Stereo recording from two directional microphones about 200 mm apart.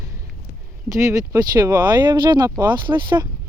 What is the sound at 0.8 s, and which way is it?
Speech, 15° right (ahead or behind).